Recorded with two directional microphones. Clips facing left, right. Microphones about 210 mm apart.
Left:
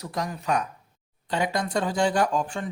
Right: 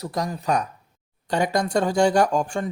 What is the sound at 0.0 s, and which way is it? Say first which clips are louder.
Speech: right 4 dB; 35° right (ahead or behind).